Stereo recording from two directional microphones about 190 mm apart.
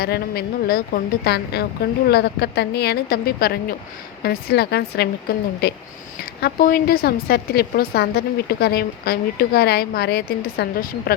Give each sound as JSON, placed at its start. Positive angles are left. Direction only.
{"t": 0.0, "sound": "a woman's voice", "side_deg": 55}